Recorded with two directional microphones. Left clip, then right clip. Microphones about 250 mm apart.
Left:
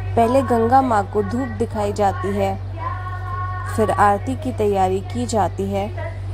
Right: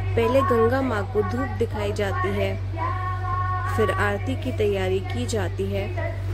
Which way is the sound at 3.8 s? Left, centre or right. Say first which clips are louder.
Left 9 dB; centre.